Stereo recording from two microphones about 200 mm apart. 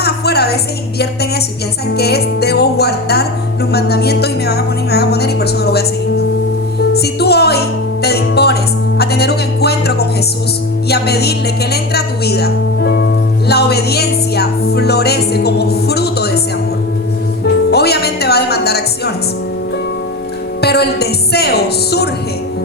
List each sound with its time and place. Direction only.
0.0 s music: 55° left (ahead or behind)
2.0 s a woman's voice: 55° left (ahead or behind)
6.9 s a woman's voice: 55° left (ahead or behind)
8.0 s music: 55° left (ahead or behind)
10.8 s a woman's voice: 55° left (ahead or behind)
13.5 s music: 55° left (ahead or behind)
17.7 s music: 55° left (ahead or behind)
20.6 s a woman's voice: 55° left (ahead or behind)